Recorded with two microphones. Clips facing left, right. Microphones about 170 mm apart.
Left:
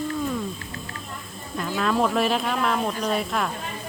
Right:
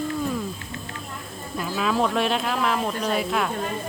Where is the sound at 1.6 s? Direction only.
5° right (ahead or behind).